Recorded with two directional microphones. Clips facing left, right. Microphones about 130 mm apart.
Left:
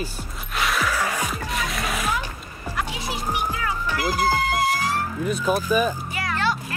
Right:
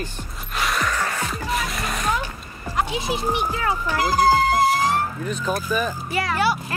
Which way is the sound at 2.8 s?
25° right (ahead or behind).